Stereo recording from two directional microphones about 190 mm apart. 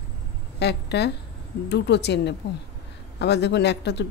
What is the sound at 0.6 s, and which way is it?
Speech, 60° left (ahead or behind).